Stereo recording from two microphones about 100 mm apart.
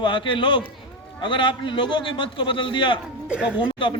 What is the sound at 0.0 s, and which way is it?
A man's voice, 55° left (ahead or behind).